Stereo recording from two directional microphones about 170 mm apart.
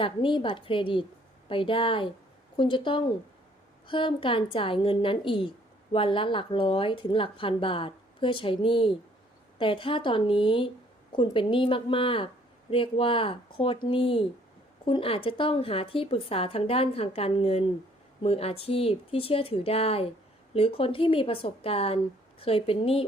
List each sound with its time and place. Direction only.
0.0 s a woman's voice: 30° left (ahead or behind)